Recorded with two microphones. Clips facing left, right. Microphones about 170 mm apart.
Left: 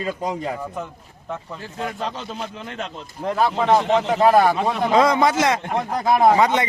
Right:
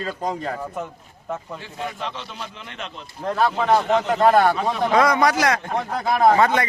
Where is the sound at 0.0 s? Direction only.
15° left (ahead or behind).